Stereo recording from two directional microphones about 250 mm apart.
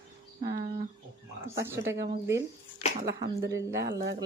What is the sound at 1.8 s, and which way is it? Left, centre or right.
Speech, centre.